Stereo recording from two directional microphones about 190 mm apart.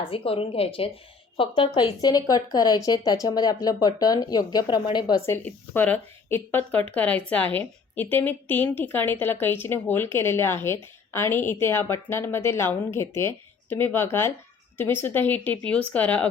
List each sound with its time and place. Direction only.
0.0 s a woman's voice: 30° left (ahead or behind); by 16.3 s 10° left (ahead or behind)